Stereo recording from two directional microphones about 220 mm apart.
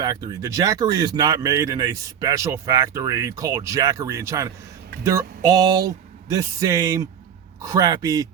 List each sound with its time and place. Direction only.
0.0 s speech: 20° right (ahead or behind)